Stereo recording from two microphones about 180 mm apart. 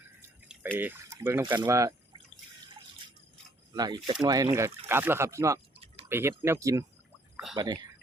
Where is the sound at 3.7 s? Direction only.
20° right (ahead or behind).